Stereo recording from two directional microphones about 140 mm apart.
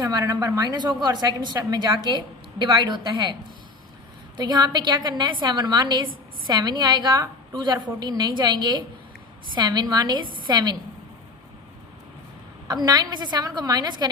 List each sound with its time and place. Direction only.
0.0 s a woman's voice: 25° right (ahead or behind)
4.4 s a woman's voice: 30° right (ahead or behind)
12.6 s a woman's voice: 30° right (ahead or behind)